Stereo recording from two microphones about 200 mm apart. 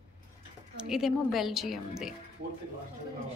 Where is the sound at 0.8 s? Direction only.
Centre (ahead or behind).